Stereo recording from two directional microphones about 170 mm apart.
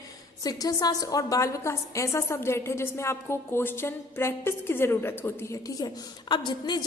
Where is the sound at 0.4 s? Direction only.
20° left (ahead or behind).